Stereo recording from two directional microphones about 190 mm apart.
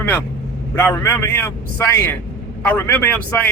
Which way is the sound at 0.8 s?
15° left (ahead or behind).